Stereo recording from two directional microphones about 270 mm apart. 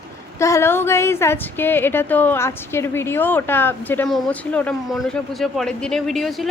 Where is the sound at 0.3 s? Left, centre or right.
Centre.